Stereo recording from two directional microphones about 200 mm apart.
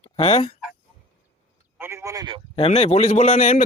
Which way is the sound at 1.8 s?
10° right (ahead or behind).